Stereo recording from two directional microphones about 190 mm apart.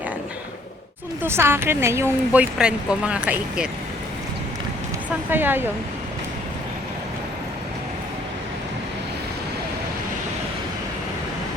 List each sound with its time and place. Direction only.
1.2 s speech: 10° right (ahead or behind)
5.0 s speech: 10° right (ahead or behind)